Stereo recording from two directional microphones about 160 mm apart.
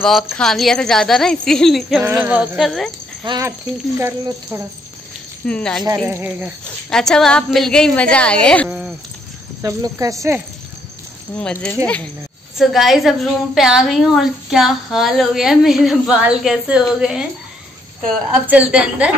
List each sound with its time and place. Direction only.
0.4 s a woman's voice: centre (ahead or behind)
2.0 s speech: 15° right (ahead or behind)
3.3 s speech: 20° right (ahead or behind)
5.5 s a woman's voice: 5° left (ahead or behind)
6.0 s speech: 10° right (ahead or behind)
6.9 s a woman's voice: 5° left (ahead or behind)
8.6 s a sound: 5° right (ahead or behind)
9.6 s speech: 20° right (ahead or behind)
11.3 s a woman's voice: 5° left (ahead or behind)
18.3 s speech: 10° right (ahead or behind)